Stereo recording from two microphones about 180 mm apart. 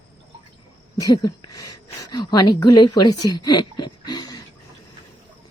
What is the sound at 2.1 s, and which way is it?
A woman's voice, 25° left (ahead or behind).